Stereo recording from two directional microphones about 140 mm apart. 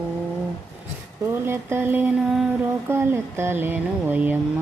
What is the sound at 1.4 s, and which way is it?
Speech, 15° right (ahead or behind).